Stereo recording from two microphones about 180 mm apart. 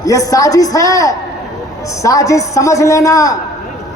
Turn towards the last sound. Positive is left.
turn(degrees=20)  # may be behind; listen again after turning